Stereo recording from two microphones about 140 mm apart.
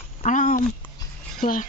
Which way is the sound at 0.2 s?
65° left (ahead or behind).